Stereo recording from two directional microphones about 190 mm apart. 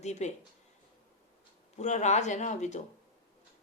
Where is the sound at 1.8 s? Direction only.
40° left (ahead or behind).